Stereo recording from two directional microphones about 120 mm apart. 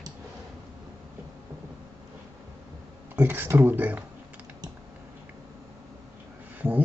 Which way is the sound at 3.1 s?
20° right (ahead or behind).